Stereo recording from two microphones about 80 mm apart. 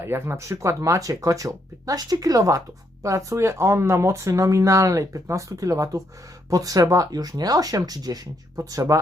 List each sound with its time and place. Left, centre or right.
0.0 s speech: right